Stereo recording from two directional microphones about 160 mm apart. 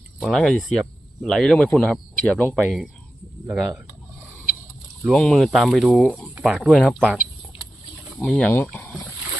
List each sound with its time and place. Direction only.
0.2 s speech: centre (ahead or behind)
2.6 s speech: centre (ahead or behind)
5.0 s speech: centre (ahead or behind)
8.2 s speech: 5° left (ahead or behind)